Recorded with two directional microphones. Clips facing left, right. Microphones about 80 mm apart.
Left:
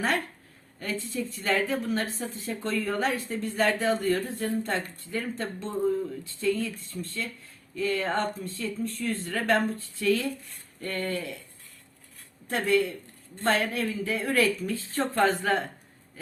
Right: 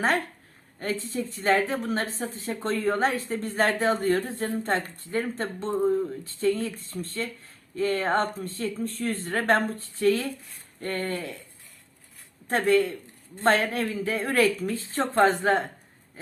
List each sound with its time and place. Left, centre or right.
0.8 s a woman's voice: right
12.5 s a woman's voice: right